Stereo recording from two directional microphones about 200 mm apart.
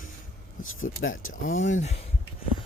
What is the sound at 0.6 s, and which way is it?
Speech, 90° left.